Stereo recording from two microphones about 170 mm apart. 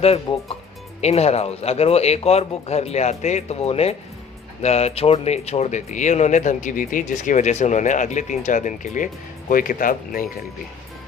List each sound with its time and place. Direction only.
0.3 s speech: 30° left (ahead or behind); by 10.2 s 55° left (ahead or behind)